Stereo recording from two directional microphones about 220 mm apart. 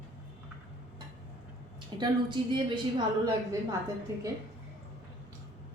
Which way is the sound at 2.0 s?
20° right (ahead or behind).